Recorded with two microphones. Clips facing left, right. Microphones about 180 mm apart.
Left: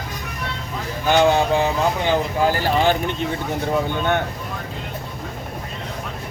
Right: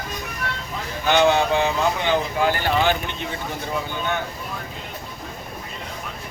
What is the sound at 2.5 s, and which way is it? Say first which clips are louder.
Speech: left 2 dB; 35° left (ahead or behind).